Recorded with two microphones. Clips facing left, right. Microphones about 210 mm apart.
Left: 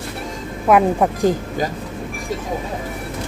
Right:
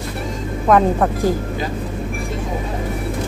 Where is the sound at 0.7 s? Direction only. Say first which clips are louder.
Even; 10° left (ahead or behind).